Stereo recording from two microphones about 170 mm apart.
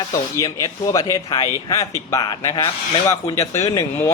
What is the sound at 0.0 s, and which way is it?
A man's voice, 20° left (ahead or behind).